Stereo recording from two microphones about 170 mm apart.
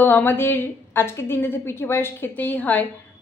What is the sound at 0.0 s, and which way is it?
A woman's voice, 10° left (ahead or behind).